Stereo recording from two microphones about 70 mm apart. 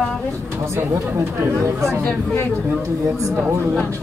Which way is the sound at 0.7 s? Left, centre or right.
Right.